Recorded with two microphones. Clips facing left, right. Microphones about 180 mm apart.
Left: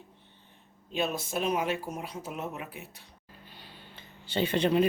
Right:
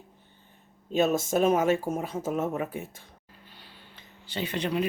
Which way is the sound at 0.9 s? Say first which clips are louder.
Right 7 dB; 45° right (ahead or behind).